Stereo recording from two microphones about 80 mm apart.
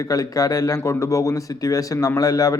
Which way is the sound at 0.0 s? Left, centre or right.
Left.